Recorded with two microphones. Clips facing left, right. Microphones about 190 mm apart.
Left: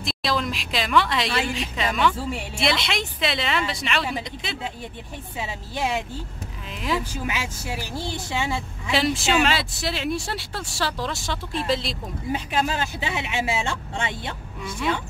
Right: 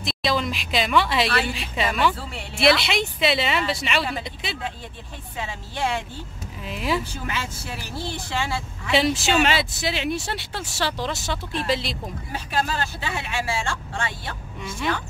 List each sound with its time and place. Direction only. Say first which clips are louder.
0.0 s speech: right 1 dB; centre (ahead or behind)
5.4 s speech: even; 10° left (ahead or behind)
7.2 s speech: left 1 dB; 10° left (ahead or behind)
8.9 s speech: right 1 dB; centre (ahead or behind)
12.3 s speech: left 2 dB; 20° left (ahead or behind)
14.6 s speech: even; centre (ahead or behind)